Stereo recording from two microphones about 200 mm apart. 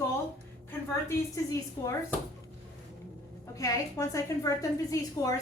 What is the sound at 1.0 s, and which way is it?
A woman's voice, 15° left (ahead or behind).